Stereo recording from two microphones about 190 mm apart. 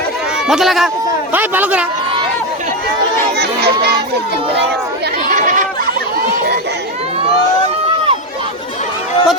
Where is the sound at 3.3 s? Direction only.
60° right (ahead or behind).